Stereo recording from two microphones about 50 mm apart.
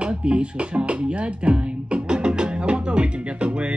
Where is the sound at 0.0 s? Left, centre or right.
Right.